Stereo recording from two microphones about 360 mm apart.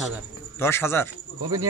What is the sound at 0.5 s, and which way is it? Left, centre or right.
Speech, centre.